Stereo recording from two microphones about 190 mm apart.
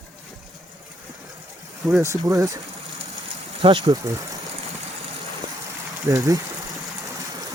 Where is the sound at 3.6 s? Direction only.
25° right (ahead or behind).